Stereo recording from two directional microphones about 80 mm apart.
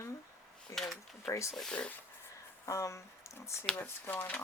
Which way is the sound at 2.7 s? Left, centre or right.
Left.